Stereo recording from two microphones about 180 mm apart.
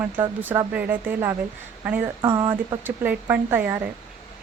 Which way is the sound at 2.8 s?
10° right (ahead or behind).